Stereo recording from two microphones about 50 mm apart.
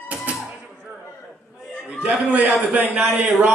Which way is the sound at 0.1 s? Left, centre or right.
Right.